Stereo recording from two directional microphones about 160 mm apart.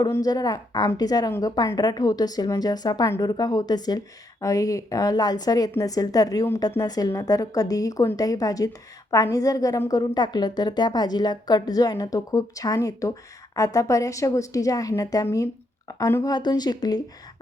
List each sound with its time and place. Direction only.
0.0 s a woman's voice: 25° left (ahead or behind)